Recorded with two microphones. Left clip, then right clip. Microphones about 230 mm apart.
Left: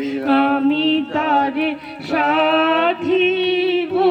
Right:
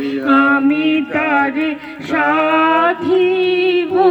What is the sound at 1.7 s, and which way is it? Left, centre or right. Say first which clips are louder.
Music: right 2 dB; right.